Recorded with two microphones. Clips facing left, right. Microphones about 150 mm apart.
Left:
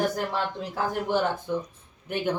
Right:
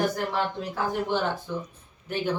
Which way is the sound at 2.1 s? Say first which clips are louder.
Left 1 dB; 15° left (ahead or behind).